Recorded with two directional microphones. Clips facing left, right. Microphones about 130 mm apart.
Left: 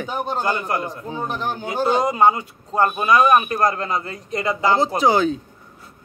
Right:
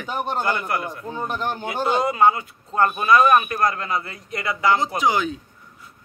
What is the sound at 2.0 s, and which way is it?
Speech, 20° left (ahead or behind).